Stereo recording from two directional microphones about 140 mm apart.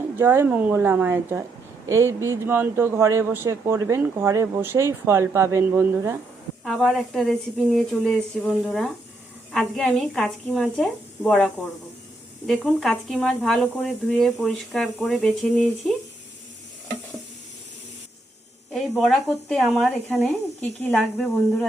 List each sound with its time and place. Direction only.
0.2 s speech: 15° right (ahead or behind)
6.7 s speech: 5° left (ahead or behind)
12.6 s speech: 5° left (ahead or behind)
18.7 s speech: centre (ahead or behind)